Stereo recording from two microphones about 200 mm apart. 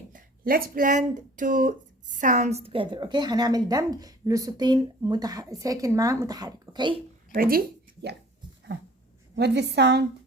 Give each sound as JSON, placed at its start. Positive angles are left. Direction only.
{"t": 0.1, "sound": "speech", "side_deg": -45}
{"t": 7.3, "sound": "speech", "side_deg": -45}
{"t": 9.3, "sound": "a woman's voice", "side_deg": -55}